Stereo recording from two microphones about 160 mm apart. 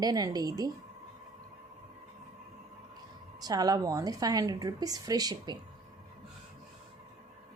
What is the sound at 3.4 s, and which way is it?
A woman's voice, 25° right (ahead or behind).